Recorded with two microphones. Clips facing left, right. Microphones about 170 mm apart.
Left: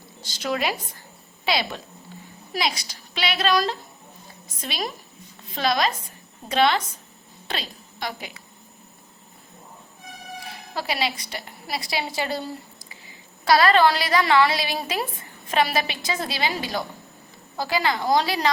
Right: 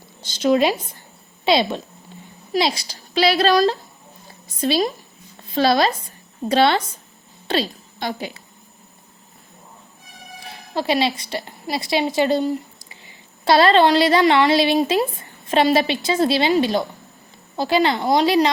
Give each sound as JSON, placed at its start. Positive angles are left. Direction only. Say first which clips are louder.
{"t": 0.3, "sound": "a woman's voice", "louder": "right 9 dB", "side_deg": -25}
{"t": 10.8, "sound": "a woman's voice", "louder": "right 7 dB", "side_deg": -25}
{"t": 13.4, "sound": "a woman's voice", "louder": "right 3 dB", "side_deg": -25}